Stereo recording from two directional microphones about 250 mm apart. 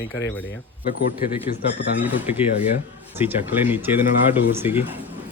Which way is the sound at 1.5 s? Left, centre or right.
Left.